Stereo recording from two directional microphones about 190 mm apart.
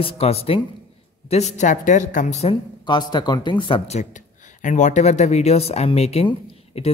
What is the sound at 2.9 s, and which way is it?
Speech, 20° left (ahead or behind).